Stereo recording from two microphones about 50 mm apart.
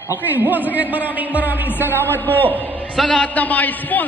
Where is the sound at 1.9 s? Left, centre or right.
Left.